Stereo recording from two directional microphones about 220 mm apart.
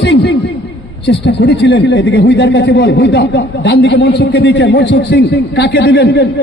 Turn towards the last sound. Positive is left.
turn(degrees=45)  # may be behind; listen again after turning